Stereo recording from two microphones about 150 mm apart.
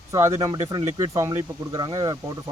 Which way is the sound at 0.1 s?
20° right (ahead or behind).